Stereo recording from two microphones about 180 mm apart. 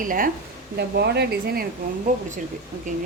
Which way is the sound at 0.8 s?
65° right (ahead or behind).